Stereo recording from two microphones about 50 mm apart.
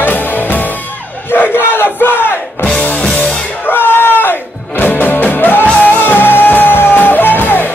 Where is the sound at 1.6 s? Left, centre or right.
Left.